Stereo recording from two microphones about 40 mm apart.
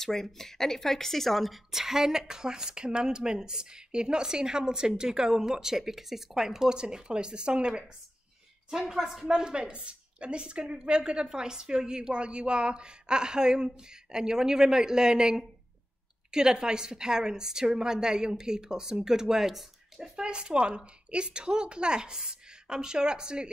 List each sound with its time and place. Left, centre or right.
0.0 s speech: centre
9.4 s a woman's voice: right
20.2 s a woman's voice: right